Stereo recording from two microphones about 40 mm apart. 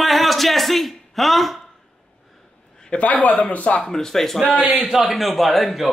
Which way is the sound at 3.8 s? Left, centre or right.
Centre.